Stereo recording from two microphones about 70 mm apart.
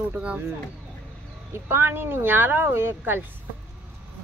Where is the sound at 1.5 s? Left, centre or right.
Right.